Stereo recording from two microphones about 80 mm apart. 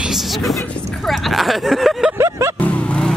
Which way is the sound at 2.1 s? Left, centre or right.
Right.